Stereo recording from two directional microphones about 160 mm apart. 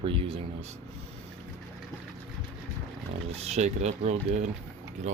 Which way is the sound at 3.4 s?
45° right (ahead or behind).